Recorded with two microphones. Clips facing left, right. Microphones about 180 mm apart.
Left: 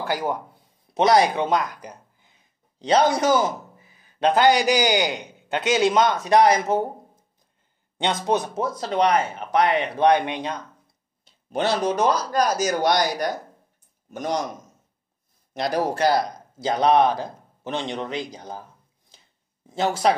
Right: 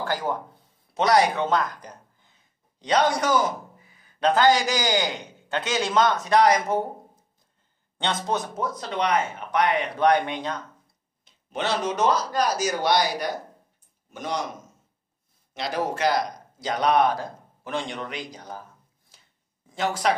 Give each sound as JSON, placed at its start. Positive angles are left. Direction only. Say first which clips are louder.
{"t": 0.0, "sound": "speech", "louder": "left 2 dB", "side_deg": 10}
{"t": 2.8, "sound": "a man's voice", "louder": "left 3 dB", "side_deg": 25}
{"t": 8.0, "sound": "a man's voice", "louder": "left 4 dB", "side_deg": 15}
{"t": 8.5, "sound": "speech", "louder": "left 5 dB", "side_deg": 30}
{"t": 11.2, "sound": "speech", "louder": "left 4 dB", "side_deg": 35}
{"t": 15.5, "sound": "speech", "louder": "left 4 dB", "side_deg": 40}
{"t": 19.1, "sound": "a sound", "louder": "left 4 dB", "side_deg": 25}